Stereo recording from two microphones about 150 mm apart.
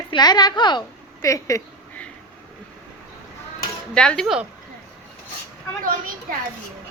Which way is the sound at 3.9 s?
5° left (ahead or behind).